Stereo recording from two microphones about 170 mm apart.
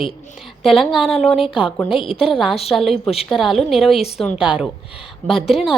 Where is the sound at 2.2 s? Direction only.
Centre (ahead or behind).